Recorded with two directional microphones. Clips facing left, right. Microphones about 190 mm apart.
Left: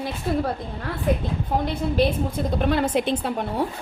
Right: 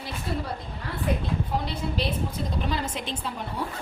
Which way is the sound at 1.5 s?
50° left (ahead or behind).